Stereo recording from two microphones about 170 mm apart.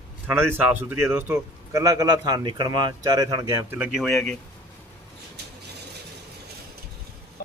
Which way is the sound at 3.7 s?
10° right (ahead or behind).